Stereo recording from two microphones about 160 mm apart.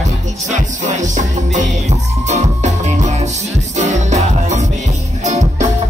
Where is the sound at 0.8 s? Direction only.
50° right (ahead or behind).